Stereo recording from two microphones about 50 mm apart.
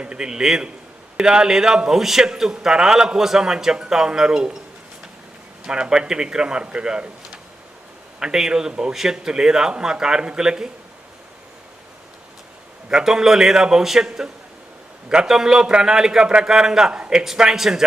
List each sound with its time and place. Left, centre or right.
0.0 s a man's voice: centre
5.6 s a man's voice: centre
8.2 s a man's voice: centre
12.9 s a man's voice: centre